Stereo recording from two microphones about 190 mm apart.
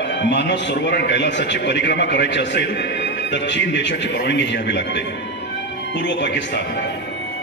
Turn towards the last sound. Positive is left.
turn(degrees=70)  # may be behind; listen again after turning